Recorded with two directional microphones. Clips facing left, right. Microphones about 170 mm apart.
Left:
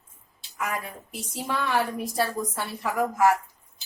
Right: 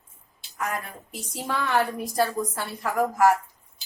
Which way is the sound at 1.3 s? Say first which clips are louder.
Right 1 dB; centre (ahead or behind).